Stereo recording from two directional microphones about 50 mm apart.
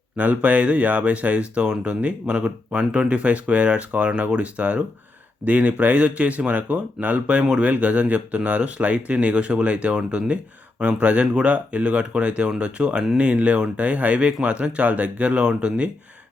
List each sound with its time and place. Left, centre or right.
0.2 s speech: right